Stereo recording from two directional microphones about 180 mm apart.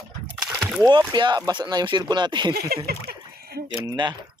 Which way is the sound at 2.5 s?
60° right (ahead or behind).